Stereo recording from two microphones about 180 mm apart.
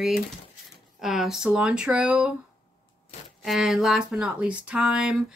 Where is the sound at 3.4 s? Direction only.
Centre (ahead or behind).